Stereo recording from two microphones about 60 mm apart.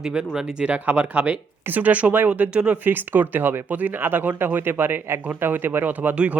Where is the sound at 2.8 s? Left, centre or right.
Right.